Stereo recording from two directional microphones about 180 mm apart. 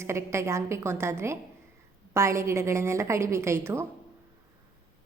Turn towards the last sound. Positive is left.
turn(degrees=-15)  # may be behind; listen again after turning